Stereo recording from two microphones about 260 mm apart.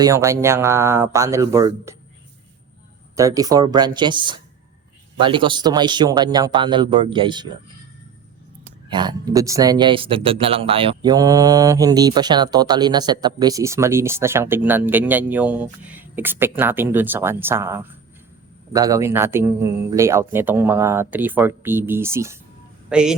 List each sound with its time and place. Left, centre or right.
0.0 s speech: centre
3.2 s speech: centre
8.9 s speech: centre